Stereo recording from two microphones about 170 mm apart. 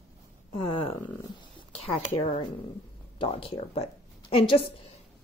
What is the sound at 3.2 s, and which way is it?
A woman's voice, 30° left (ahead or behind).